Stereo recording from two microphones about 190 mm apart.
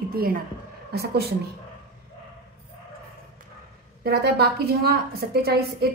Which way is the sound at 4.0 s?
55° right (ahead or behind).